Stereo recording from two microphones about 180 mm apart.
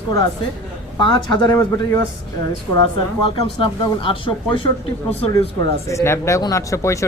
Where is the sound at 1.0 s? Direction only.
25° left (ahead or behind).